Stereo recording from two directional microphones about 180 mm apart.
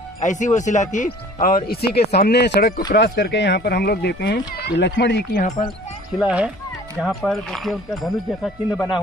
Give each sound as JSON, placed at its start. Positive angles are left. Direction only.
{"t": 0.2, "sound": "speech", "side_deg": 45}
{"t": 1.7, "sound": "speech", "side_deg": 60}
{"t": 6.1, "sound": "speech", "side_deg": -5}